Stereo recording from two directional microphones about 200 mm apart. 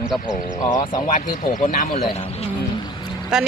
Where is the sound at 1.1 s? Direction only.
40° left (ahead or behind).